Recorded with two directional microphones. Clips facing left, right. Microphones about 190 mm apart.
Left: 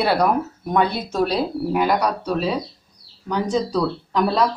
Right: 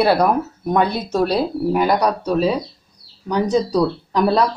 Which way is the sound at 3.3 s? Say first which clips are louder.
Right 4 dB; 40° right (ahead or behind).